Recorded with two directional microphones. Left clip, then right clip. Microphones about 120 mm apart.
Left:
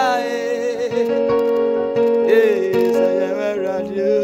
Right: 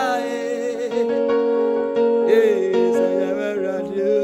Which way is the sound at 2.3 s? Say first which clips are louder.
Left 2 dB; 15° right (ahead or behind).